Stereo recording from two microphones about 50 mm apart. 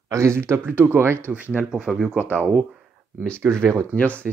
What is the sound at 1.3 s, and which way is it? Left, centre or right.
Speech, right.